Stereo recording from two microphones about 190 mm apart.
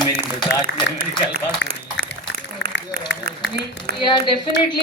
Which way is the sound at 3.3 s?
60° right (ahead or behind).